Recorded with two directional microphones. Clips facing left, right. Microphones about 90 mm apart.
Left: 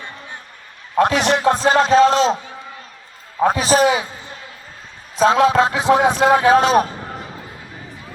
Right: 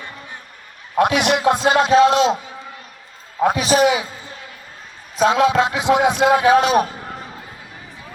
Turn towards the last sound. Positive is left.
turn(degrees=35)  # may be behind; listen again after turning